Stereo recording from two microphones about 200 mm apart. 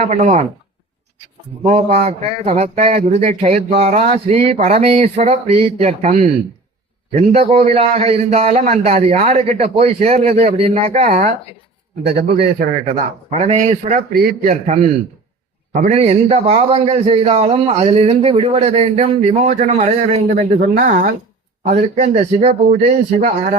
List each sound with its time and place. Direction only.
0.0 s a man's voice: 35° right (ahead or behind)
1.6 s a man's voice: 30° right (ahead or behind)
12.1 s a man's voice: 50° right (ahead or behind)
12.8 s a man's voice: 35° right (ahead or behind)
14.1 s a man's voice: 50° right (ahead or behind)
14.5 s a man's voice: 35° right (ahead or behind)